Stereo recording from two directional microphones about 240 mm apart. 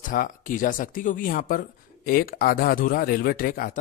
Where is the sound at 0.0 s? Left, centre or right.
Left.